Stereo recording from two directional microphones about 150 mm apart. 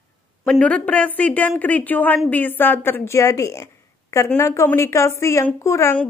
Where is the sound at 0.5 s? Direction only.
10° left (ahead or behind).